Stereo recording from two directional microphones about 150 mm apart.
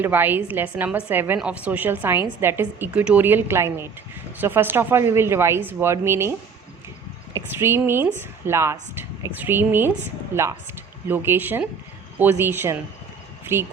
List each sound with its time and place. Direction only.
0.0 s a woman's voice: 15° right (ahead or behind)
7.3 s a woman's voice: 15° right (ahead or behind)
11.1 s a woman's voice: 15° right (ahead or behind)